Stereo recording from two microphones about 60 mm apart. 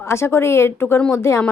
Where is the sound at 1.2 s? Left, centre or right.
Left.